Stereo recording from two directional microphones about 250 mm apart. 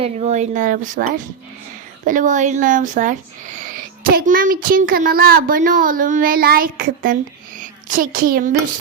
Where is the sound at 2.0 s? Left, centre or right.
Right.